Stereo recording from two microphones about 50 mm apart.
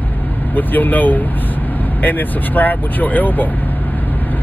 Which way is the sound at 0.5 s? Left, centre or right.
Left.